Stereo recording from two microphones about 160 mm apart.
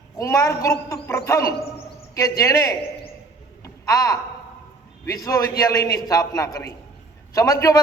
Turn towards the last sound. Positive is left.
turn(degrees=20)  # may be behind; listen again after turning